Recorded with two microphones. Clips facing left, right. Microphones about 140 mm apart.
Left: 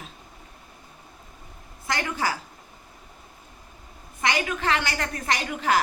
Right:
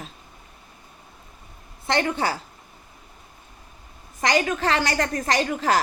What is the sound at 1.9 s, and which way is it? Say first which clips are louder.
Speech: right 4 dB; 30° right (ahead or behind).